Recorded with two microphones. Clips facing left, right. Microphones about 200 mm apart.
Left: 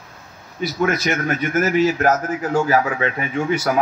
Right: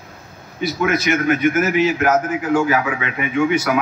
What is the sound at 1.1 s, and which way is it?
A man's voice, 40° left (ahead or behind).